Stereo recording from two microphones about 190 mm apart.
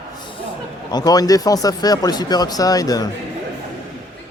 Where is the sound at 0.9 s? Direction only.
20° left (ahead or behind).